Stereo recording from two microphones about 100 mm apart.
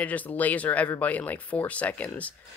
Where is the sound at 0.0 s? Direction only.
15° left (ahead or behind).